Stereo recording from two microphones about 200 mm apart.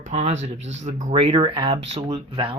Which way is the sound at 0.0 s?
35° right (ahead or behind).